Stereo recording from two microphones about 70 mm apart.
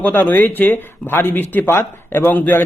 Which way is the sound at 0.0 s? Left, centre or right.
Left.